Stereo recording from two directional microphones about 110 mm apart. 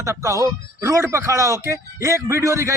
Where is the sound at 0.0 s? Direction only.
25° right (ahead or behind).